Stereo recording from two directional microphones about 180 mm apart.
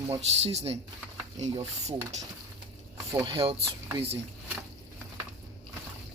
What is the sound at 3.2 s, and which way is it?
Speech, 30° right (ahead or behind).